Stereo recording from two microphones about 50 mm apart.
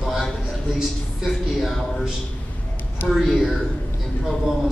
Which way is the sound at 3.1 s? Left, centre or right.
Centre.